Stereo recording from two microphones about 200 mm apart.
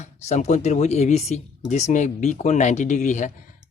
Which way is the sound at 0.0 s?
35° left (ahead or behind).